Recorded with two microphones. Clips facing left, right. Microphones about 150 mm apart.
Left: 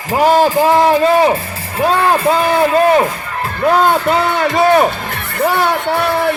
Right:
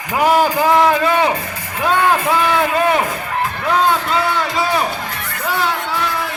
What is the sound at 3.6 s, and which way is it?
Speech, 55° left (ahead or behind).